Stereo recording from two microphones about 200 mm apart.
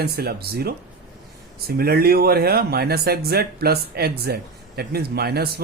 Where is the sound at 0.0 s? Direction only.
50° right (ahead or behind).